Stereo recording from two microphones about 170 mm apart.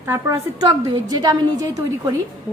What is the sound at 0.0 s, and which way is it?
A woman's voice, 15° right (ahead or behind).